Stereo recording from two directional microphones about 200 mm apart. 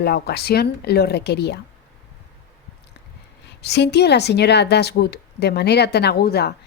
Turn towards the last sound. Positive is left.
turn(degrees=50)  # may be behind; listen again after turning